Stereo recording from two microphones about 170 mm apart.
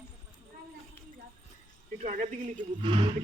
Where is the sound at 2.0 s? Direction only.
50° right (ahead or behind).